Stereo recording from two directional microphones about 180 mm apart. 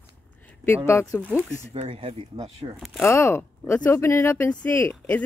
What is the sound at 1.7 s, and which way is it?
Speech, 30° right (ahead or behind).